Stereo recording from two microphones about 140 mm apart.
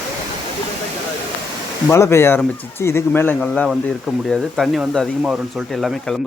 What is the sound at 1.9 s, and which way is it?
Speech, 20° left (ahead or behind).